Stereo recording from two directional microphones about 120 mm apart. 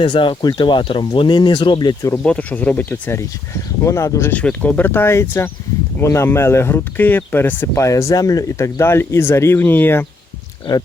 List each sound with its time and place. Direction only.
0.0 s speech: 45° left (ahead or behind)
2.1 s speech: 10° left (ahead or behind); by 4.3 s 25° left (ahead or behind)
4.3 s speech: 10° left (ahead or behind)